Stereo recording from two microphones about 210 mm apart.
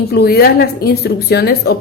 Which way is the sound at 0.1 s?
50° left (ahead or behind).